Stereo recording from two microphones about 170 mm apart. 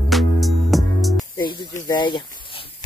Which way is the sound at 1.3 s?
25° left (ahead or behind).